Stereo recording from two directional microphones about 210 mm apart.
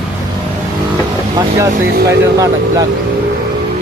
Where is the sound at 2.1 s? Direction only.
15° right (ahead or behind).